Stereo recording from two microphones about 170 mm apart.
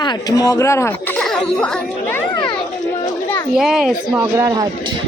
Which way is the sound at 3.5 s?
5° right (ahead or behind).